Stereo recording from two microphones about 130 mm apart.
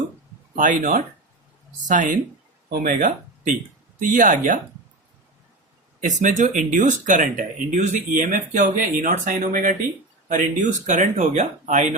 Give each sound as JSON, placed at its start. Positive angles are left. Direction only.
{"t": 0.5, "sound": "speech", "side_deg": -85}
{"t": 1.8, "sound": "speech", "side_deg": -75}
{"t": 2.7, "sound": "speech", "side_deg": -90}
{"t": 6.0, "sound": "speech", "side_deg": -75}
{"t": 10.2, "sound": "speech", "side_deg": -75}